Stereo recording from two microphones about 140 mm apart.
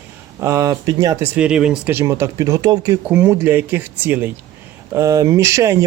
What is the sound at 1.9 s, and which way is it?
Speech, 20° right (ahead or behind).